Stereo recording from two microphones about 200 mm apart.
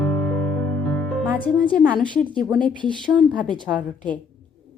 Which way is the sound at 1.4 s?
5° left (ahead or behind).